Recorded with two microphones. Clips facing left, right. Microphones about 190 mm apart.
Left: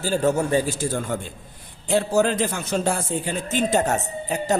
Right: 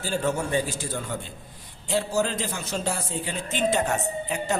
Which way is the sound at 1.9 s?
55° left (ahead or behind).